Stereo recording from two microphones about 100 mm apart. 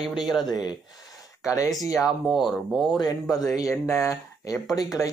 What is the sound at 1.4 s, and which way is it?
Speech, 30° left (ahead or behind).